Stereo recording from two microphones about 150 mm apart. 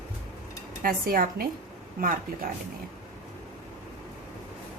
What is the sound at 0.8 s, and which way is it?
Speech, 75° right (ahead or behind).